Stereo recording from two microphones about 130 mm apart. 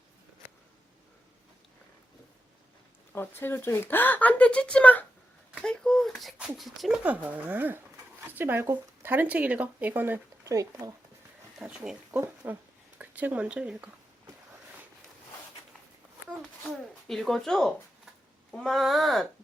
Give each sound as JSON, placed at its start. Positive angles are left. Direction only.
{"t": 3.1, "sound": "speech", "side_deg": 15}
{"t": 7.0, "sound": "speech", "side_deg": -10}
{"t": 10.4, "sound": "speech", "side_deg": -25}
{"t": 11.6, "sound": "speech", "side_deg": -5}
{"t": 12.2, "sound": "speech", "side_deg": -20}
{"t": 16.6, "sound": "speech", "side_deg": 0}